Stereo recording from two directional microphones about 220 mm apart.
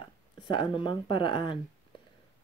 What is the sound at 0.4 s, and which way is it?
Speech, 20° left (ahead or behind).